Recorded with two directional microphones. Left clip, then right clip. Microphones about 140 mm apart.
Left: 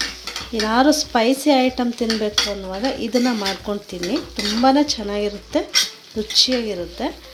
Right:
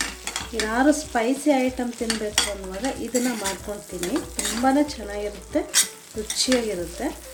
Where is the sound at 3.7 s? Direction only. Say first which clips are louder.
Left 4 dB; 45° left (ahead or behind).